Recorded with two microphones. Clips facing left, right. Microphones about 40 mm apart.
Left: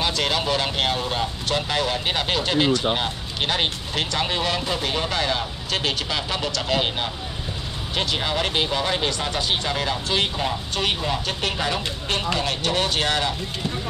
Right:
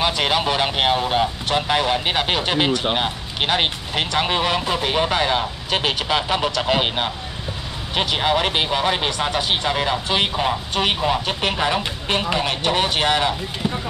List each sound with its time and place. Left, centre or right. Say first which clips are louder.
0.0 s speech: right 4 dB; centre